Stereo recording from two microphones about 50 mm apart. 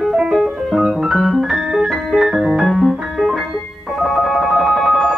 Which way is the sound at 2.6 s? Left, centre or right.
Centre.